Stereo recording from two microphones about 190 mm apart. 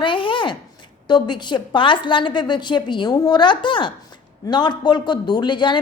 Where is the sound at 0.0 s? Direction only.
25° left (ahead or behind).